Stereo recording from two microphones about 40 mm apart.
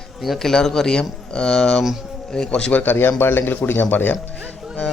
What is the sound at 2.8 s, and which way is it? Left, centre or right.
Speech, left.